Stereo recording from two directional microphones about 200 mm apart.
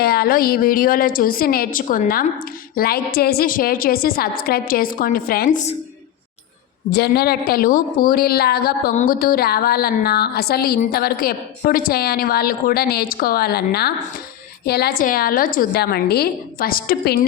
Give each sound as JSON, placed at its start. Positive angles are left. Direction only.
{"t": 0.0, "sound": "a woman's voice", "side_deg": 50}
{"t": 6.9, "sound": "a woman's voice", "side_deg": 50}